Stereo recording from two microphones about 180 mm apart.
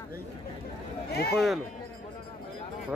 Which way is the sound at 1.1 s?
60° left (ahead or behind).